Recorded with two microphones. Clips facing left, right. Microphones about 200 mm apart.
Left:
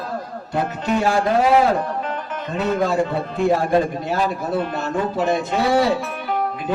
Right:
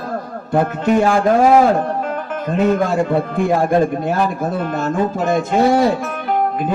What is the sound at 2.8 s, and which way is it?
Speech, 50° right (ahead or behind).